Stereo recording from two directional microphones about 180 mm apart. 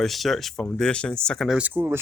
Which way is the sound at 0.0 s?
Centre (ahead or behind).